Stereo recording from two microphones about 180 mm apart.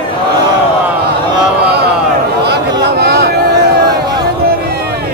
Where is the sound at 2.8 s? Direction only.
65° right (ahead or behind).